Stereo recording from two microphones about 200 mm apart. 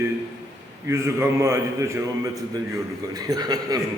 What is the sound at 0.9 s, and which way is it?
A man's voice, 15° right (ahead or behind).